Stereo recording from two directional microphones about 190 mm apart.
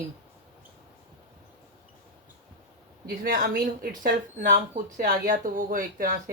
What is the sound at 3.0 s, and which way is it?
Speech, 50° right (ahead or behind).